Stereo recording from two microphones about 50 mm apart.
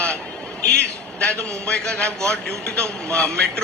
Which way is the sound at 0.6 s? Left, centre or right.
Left.